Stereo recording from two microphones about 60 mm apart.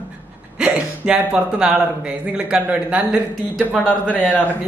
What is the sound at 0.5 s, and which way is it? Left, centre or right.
A man's voice, centre.